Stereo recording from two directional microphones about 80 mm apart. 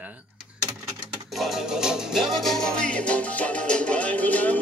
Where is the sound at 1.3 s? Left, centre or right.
Centre.